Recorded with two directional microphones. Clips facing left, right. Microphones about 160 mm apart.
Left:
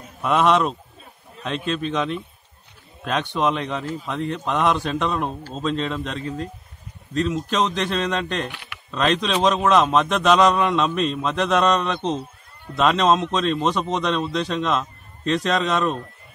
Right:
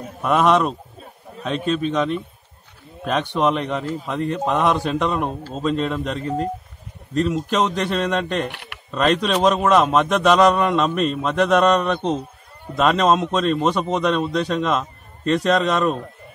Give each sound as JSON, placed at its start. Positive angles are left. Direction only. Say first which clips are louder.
{"t": 0.2, "sound": "a man's voice", "louder": "right 1 dB", "side_deg": 0}
{"t": 8.5, "sound": "a sound", "louder": "right 3 dB", "side_deg": -65}
{"t": 8.9, "sound": "a man's voice", "louder": "right 2 dB", "side_deg": -5}